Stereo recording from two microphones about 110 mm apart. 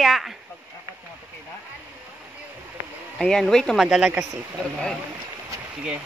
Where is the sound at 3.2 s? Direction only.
5° left (ahead or behind).